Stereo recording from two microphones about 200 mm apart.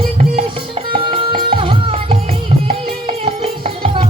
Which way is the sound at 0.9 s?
25° right (ahead or behind).